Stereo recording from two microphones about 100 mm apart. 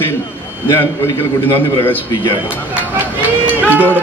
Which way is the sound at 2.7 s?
20° right (ahead or behind).